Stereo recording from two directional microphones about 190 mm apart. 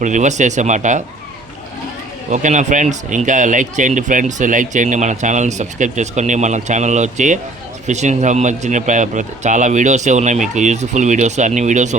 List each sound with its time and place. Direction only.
0.0 s speech: 40° right (ahead or behind)
2.3 s speech: 40° right (ahead or behind)